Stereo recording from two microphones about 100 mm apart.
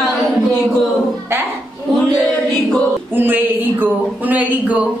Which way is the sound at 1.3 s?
25° right (ahead or behind).